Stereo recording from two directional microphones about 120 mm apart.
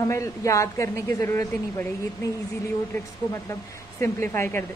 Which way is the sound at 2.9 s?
20° left (ahead or behind).